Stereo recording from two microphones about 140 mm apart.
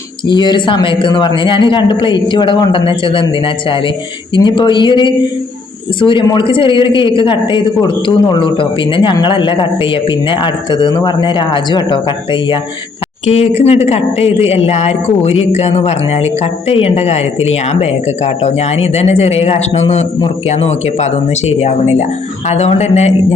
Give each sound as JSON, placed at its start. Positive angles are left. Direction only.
{"t": 0.3, "sound": "a man's voice", "side_deg": 35}
{"t": 13.2, "sound": "a man's voice", "side_deg": 50}